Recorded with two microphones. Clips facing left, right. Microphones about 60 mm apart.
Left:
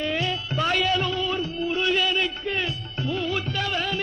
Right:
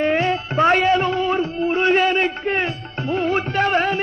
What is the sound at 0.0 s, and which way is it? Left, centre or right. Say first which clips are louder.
Music: right 8 dB; right.